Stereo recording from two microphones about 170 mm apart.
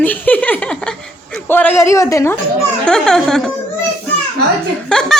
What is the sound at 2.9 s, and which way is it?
Speech, 5° left (ahead or behind).